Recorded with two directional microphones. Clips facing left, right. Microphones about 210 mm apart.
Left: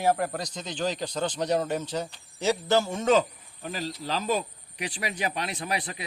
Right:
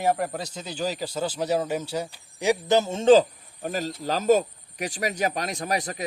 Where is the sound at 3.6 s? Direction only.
45° right (ahead or behind).